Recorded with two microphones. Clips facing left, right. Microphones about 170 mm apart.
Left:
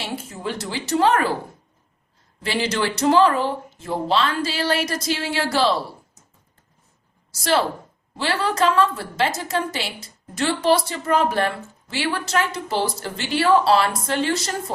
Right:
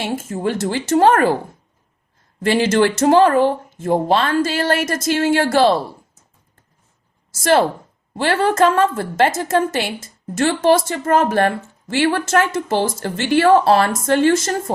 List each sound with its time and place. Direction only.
0.0 s a woman's voice: 50° right (ahead or behind)
2.4 s a woman's voice: 50° right (ahead or behind)
7.3 s a woman's voice: 50° right (ahead or behind)